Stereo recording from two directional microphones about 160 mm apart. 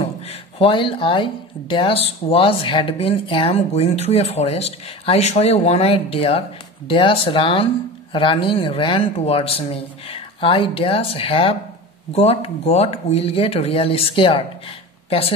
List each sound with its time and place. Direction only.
0.0 s speech: 35° left (ahead or behind)